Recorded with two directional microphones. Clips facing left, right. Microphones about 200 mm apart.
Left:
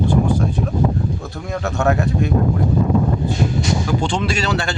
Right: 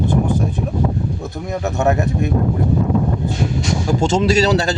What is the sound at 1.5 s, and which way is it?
Speech, 20° right (ahead or behind).